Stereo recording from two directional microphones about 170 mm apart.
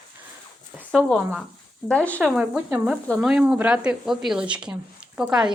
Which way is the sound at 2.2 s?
5° right (ahead or behind).